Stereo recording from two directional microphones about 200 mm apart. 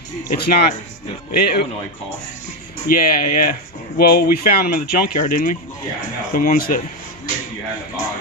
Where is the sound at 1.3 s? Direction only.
50° left (ahead or behind).